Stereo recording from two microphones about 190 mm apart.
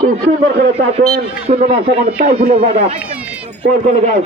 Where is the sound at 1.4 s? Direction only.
35° right (ahead or behind).